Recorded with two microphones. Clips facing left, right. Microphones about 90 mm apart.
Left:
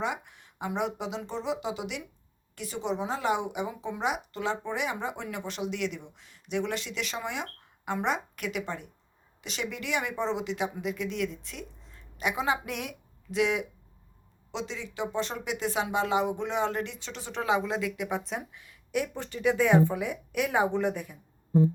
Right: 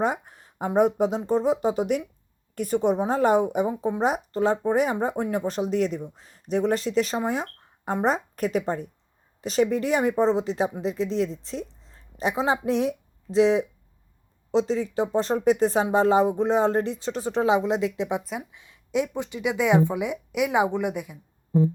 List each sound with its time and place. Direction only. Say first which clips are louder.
0.0 s speech: right 7 dB; 40° right (ahead or behind); by 21.2 s 15° right (ahead or behind)